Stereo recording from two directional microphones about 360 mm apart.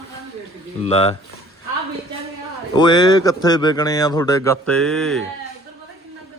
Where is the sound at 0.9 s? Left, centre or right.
Centre.